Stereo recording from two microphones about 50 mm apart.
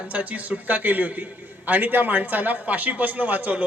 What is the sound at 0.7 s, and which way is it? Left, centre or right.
A man's voice, right.